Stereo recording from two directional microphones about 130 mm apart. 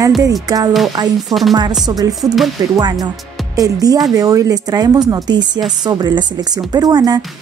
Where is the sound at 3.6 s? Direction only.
25° right (ahead or behind).